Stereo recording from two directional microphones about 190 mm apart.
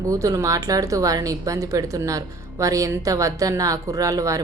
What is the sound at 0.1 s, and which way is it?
Speech, 15° right (ahead or behind).